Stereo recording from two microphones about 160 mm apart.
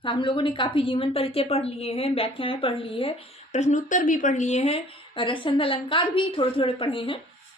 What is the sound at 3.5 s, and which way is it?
A woman's voice, 50° left (ahead or behind).